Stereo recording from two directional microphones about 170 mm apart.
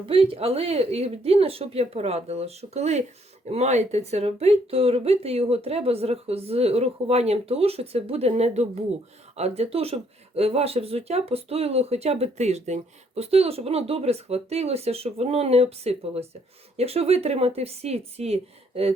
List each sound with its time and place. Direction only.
0.0 s speech: 35° right (ahead or behind)